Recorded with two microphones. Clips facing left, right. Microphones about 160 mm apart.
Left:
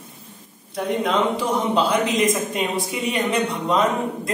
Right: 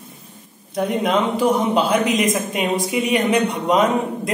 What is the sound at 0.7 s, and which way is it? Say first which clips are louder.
A man's voice: right 2 dB; 20° right (ahead or behind).